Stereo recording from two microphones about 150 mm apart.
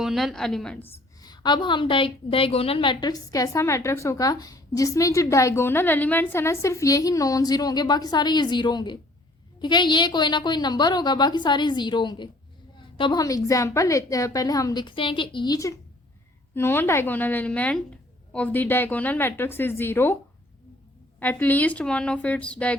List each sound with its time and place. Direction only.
0.0 s a woman's voice: centre (ahead or behind)
1.2 s a woman's voice: 30° left (ahead or behind)
21.2 s a woman's voice: 10° left (ahead or behind)